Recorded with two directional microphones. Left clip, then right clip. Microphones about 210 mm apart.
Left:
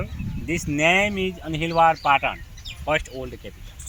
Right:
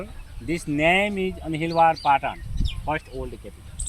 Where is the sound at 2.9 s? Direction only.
30° left (ahead or behind).